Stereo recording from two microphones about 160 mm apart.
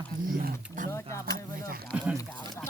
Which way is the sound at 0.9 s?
20° left (ahead or behind).